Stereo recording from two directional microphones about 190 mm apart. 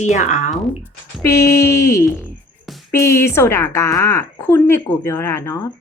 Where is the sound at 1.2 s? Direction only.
15° left (ahead or behind).